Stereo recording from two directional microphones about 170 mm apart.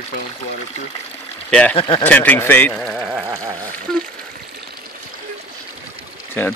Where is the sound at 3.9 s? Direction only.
5° left (ahead or behind).